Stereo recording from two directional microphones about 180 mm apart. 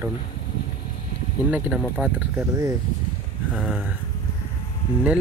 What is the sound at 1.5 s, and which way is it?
Speech, 5° right (ahead or behind).